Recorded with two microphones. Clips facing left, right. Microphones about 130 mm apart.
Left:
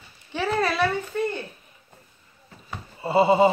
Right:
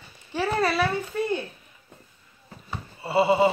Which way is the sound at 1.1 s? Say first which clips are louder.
Left 3 dB; 5° right (ahead or behind).